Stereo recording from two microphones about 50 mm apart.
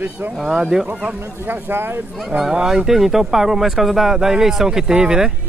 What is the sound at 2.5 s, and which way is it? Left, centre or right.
Speech, centre.